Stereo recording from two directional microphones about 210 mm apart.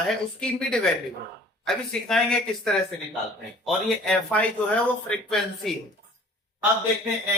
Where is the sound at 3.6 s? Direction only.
5° left (ahead or behind).